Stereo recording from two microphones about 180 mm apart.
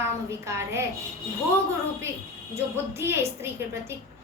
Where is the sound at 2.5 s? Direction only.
15° right (ahead or behind).